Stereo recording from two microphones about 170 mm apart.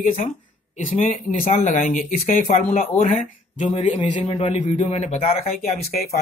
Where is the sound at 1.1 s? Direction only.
40° left (ahead or behind).